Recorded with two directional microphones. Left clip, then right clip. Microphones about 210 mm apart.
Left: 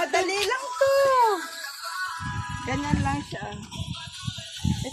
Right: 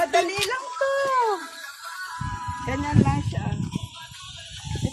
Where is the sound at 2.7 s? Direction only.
35° left (ahead or behind).